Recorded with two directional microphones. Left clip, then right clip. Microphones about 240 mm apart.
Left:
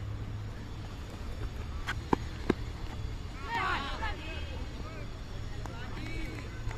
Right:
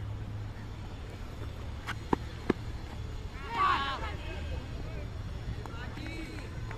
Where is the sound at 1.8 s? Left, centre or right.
Centre.